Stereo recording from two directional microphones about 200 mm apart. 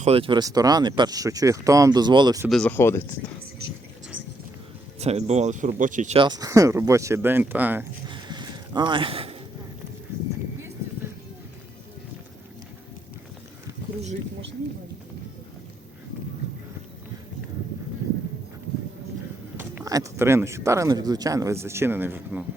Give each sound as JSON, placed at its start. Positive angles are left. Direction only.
{"t": 0.0, "sound": "speech", "side_deg": -30}
{"t": 2.5, "sound": "speech", "side_deg": 5}
{"t": 4.9, "sound": "speech", "side_deg": -30}
{"t": 6.1, "sound": "speech", "side_deg": -20}
{"t": 8.0, "sound": "a sound", "side_deg": -20}
{"t": 19.5, "sound": "speech", "side_deg": -15}